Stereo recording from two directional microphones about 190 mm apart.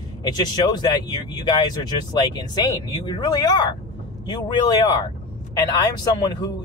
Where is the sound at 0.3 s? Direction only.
20° left (ahead or behind).